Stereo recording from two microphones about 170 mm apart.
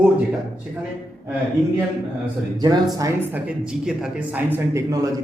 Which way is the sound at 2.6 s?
25° right (ahead or behind).